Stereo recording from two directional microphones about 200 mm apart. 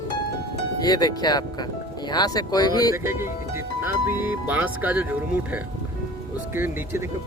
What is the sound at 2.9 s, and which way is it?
A man's voice, 15° right (ahead or behind).